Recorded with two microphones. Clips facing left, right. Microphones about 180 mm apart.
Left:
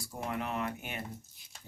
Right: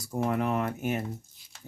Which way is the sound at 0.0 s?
45° right (ahead or behind).